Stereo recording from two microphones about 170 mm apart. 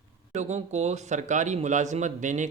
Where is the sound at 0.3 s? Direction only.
40° right (ahead or behind).